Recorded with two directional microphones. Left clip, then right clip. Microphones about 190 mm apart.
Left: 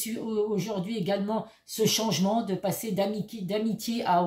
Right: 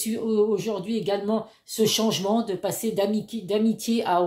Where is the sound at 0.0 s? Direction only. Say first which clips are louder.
Right 6 dB; 30° right (ahead or behind).